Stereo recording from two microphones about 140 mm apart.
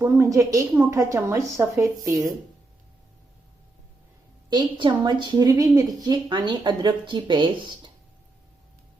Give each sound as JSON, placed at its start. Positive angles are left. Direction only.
{"t": 0.0, "sound": "a woman's voice", "side_deg": -20}
{"t": 4.4, "sound": "a woman's voice", "side_deg": -30}